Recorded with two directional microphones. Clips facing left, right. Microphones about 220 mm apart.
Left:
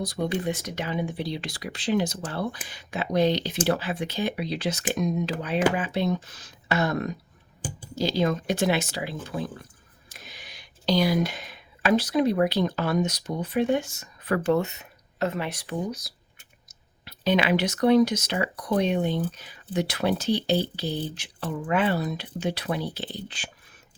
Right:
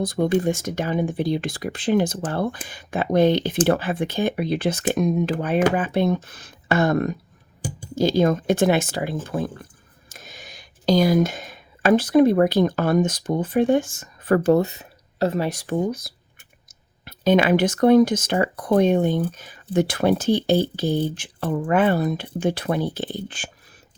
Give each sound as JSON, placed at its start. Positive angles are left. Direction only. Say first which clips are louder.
{"t": 0.0, "sound": "speech", "louder": "right 7 dB", "side_deg": -50}